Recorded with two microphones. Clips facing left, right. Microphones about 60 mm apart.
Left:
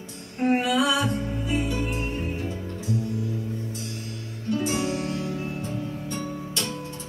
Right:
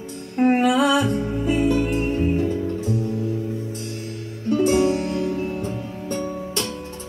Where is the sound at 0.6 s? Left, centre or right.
Right.